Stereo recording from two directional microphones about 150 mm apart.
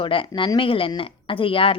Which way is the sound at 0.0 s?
35° left (ahead or behind).